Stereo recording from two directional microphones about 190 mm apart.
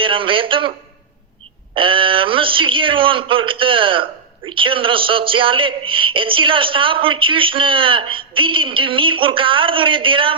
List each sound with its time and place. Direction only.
0.0 s a man's voice: 25° right (ahead or behind)
1.7 s a man's voice: 25° right (ahead or behind)